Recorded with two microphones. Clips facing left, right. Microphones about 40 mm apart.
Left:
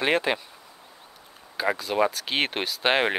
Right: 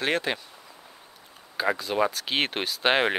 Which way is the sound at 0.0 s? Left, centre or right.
Centre.